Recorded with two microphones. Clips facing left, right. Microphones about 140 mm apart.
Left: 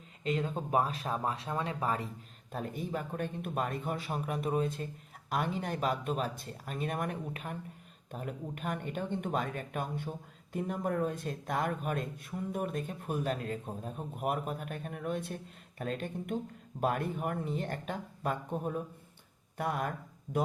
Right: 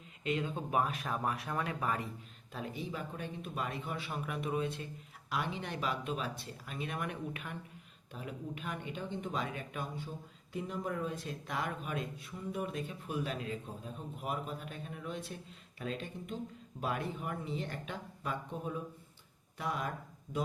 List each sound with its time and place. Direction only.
0.3 s speech: 40° left (ahead or behind)
2.5 s speech: 45° left (ahead or behind)